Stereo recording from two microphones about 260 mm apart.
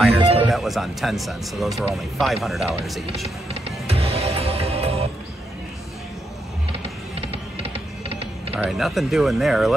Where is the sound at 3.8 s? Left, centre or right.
Right.